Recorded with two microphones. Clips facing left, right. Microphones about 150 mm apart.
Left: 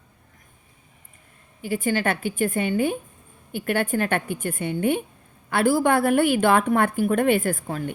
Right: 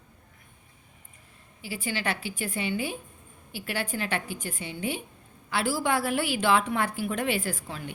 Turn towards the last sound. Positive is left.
turn(degrees=50)  # may be behind; listen again after turning